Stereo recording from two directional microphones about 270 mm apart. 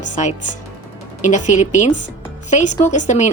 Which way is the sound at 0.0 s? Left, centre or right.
Left.